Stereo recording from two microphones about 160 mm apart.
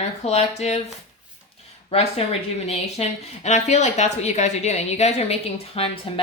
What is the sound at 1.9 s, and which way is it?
A woman's voice, 40° left (ahead or behind).